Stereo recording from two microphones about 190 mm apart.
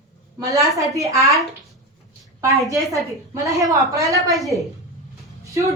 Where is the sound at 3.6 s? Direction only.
15° right (ahead or behind).